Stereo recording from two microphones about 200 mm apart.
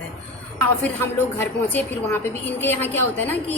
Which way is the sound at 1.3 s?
10° left (ahead or behind).